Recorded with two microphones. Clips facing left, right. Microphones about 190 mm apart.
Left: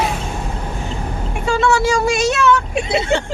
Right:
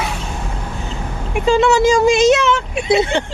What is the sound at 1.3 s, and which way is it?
Speech, 20° right (ahead or behind).